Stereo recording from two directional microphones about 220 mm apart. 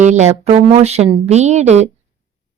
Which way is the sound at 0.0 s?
30° right (ahead or behind).